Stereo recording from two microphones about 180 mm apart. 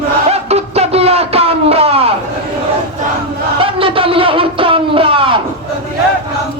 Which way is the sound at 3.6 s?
30° right (ahead or behind).